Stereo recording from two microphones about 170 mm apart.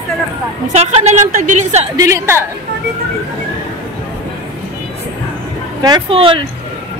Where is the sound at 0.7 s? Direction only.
40° right (ahead or behind).